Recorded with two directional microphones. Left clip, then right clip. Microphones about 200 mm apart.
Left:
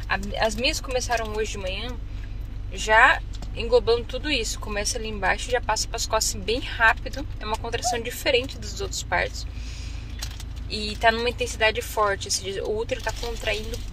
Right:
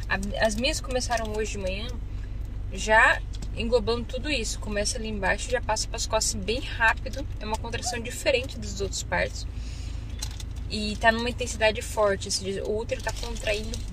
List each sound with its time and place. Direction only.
0.1 s speech: 5° right (ahead or behind)
10.7 s speech: 5° right (ahead or behind)
13.2 s a woman's voice: 25° left (ahead or behind)